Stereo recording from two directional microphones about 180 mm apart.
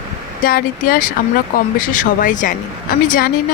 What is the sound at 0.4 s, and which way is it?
Speech, 55° left (ahead or behind).